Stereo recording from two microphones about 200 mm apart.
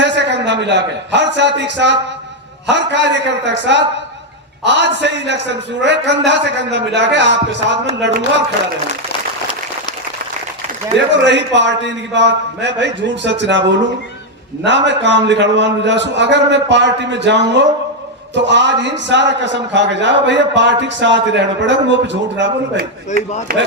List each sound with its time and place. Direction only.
0.0 s a man's voice: 60° right (ahead or behind)
11.1 s a man's voice: 60° right (ahead or behind)
23.1 s speech: 35° left (ahead or behind)
23.5 s speech: 45° right (ahead or behind)